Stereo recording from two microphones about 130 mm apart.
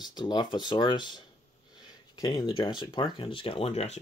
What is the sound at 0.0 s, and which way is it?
Speech, 35° left (ahead or behind).